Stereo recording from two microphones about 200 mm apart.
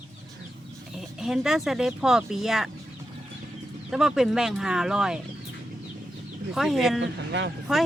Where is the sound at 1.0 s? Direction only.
Centre (ahead or behind).